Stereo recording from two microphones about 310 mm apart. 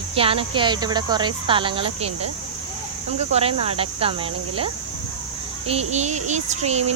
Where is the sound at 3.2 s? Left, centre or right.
Centre.